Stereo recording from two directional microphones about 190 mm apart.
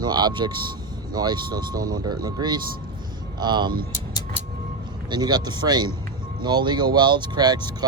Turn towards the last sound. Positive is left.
turn(degrees=-20)  # may be behind; listen again after turning